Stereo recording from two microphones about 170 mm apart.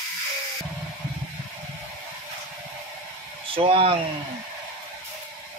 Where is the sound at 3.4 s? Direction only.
30° right (ahead or behind).